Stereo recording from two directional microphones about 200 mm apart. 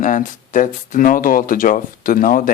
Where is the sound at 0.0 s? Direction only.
40° left (ahead or behind).